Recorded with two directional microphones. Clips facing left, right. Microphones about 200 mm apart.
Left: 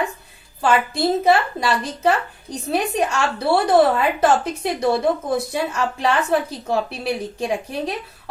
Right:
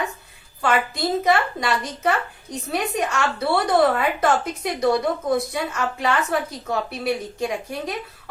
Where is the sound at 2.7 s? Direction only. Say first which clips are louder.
Left 3 dB; 30° left (ahead or behind).